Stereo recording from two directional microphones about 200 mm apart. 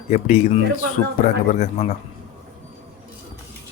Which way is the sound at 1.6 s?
35° left (ahead or behind).